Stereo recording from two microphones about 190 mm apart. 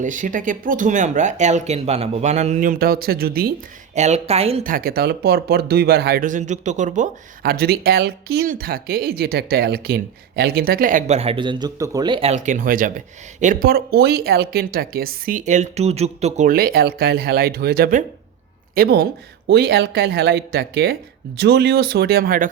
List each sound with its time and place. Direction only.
0.0 s speech: 40° right (ahead or behind)
3.9 s speech: 35° right (ahead or behind)
4.6 s speech: 50° right (ahead or behind); by 12.3 s 25° right (ahead or behind)
12.3 s speech: 40° right (ahead or behind)
16.5 s speech: 50° right (ahead or behind)